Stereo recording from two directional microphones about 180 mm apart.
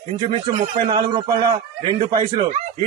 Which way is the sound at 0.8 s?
25° right (ahead or behind).